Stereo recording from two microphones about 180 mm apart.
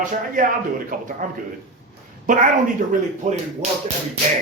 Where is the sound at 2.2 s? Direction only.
45° right (ahead or behind).